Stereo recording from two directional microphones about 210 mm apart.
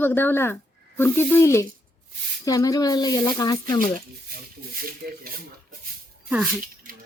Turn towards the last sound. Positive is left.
turn(degrees=0)  # may be behind; listen again after turning